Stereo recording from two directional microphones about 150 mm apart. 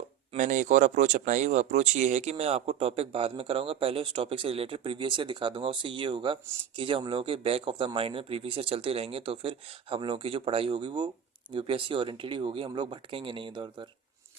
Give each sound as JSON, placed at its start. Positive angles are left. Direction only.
{"t": 0.3, "sound": "speech", "side_deg": -55}